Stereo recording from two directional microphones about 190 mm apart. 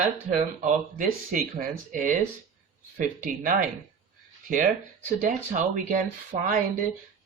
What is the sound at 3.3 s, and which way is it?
Speech, 45° right (ahead or behind).